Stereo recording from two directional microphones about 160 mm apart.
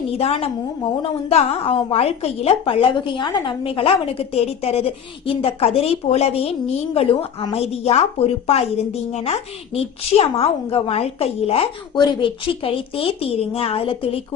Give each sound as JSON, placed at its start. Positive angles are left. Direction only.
{"t": 0.1, "sound": "a woman's voice", "side_deg": 40}